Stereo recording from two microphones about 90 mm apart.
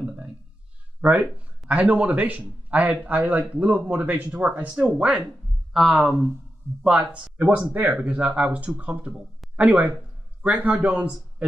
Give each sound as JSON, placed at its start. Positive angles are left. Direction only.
{"t": 1.0, "sound": "a man's voice", "side_deg": -15}